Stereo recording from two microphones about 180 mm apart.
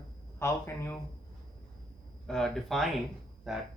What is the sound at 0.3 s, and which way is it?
Speech, 15° left (ahead or behind).